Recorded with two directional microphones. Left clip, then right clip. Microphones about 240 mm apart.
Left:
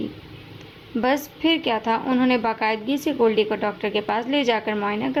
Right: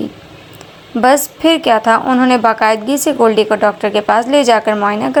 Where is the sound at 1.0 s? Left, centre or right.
Right.